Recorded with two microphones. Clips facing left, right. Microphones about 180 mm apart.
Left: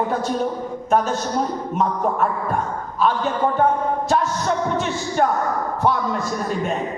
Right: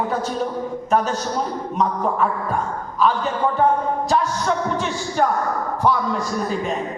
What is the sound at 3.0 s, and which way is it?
A man's voice, centre (ahead or behind).